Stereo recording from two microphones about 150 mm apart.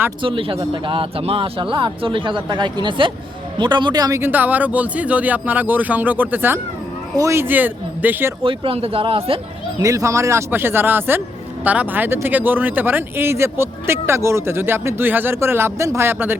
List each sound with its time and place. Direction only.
0.2 s speech: 35° right (ahead or behind); by 8.3 s 10° right (ahead or behind)
8.4 s speech: 40° right (ahead or behind)
9.8 s speech: 20° right (ahead or behind)